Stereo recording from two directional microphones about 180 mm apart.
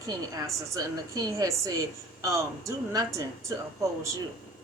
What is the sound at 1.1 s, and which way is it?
A woman's voice, 20° right (ahead or behind).